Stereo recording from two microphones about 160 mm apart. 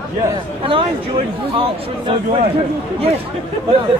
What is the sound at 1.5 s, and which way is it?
Speech, 35° right (ahead or behind).